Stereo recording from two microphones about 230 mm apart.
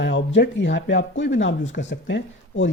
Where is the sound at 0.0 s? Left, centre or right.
Left.